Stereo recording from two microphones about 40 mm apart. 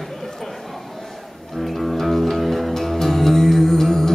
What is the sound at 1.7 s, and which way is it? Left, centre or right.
Music, centre.